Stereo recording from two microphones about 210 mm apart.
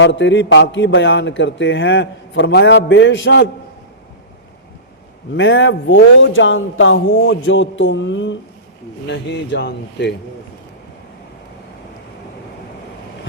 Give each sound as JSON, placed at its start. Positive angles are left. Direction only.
{"t": 0.0, "sound": "a man's voice", "side_deg": 60}
{"t": 5.4, "sound": "a man's voice", "side_deg": 60}